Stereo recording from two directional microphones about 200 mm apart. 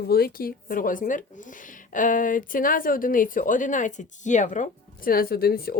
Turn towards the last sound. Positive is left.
turn(degrees=50)  # may be behind; listen again after turning